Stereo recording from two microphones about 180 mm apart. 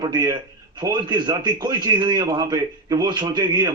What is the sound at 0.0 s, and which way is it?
A man's voice, 25° right (ahead or behind).